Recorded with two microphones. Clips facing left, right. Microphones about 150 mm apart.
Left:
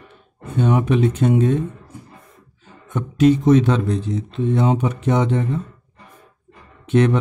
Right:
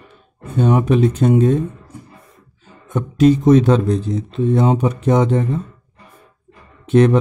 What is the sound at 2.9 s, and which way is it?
Speech, 40° right (ahead or behind).